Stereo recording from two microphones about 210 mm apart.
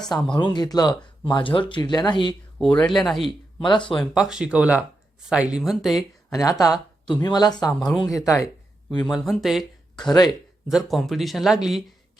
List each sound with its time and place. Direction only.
0.3 s speech: 20° left (ahead or behind)
2.6 s speech: 5° left (ahead or behind)
3.2 s speech: 20° left (ahead or behind)
4.0 s speech: centre (ahead or behind)
6.3 s speech: 15° left (ahead or behind)
7.7 s speech: 5° left (ahead or behind)
7.9 s speech: 15° left (ahead or behind)
9.0 s speech: centre (ahead or behind)
10.1 s speech: 20° left (ahead or behind)
10.7 s speech: centre (ahead or behind)